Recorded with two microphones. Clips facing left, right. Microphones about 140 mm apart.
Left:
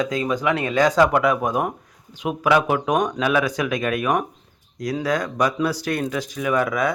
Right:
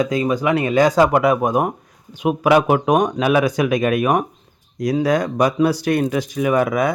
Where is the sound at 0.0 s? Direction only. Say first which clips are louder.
Right 4 dB; 5° right (ahead or behind).